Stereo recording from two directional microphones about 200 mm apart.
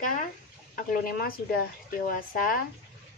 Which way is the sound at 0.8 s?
45° left (ahead or behind).